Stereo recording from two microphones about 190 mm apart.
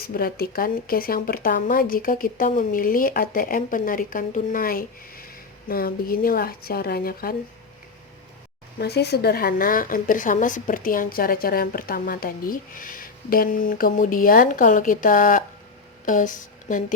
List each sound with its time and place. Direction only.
0.0 s speech: 50° left (ahead or behind)
8.8 s speech: 60° left (ahead or behind); by 16.8 s 45° left (ahead or behind)